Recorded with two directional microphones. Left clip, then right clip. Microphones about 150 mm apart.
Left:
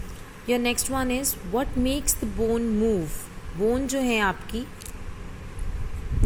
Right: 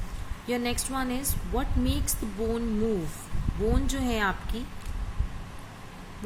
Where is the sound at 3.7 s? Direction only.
25° left (ahead or behind).